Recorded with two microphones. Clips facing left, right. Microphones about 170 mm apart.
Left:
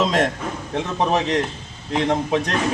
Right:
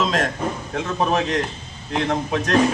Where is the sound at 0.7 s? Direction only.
20° left (ahead or behind).